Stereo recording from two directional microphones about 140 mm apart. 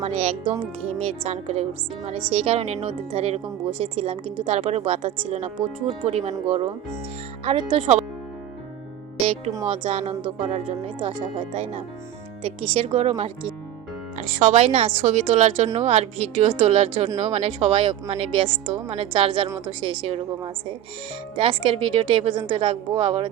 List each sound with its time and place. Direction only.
0.0 s a woman's voice: 50° right (ahead or behind)
0.4 s speech: 10° right (ahead or behind)
0.9 s a woman's voice: 45° right (ahead or behind)
7.4 s speech: 35° right (ahead or behind)
9.2 s a woman's voice: 45° right (ahead or behind)